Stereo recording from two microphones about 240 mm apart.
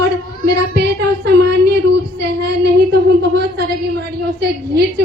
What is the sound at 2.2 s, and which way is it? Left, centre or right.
A child's voice, right.